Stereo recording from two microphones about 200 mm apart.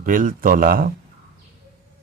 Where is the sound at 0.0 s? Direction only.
45° right (ahead or behind).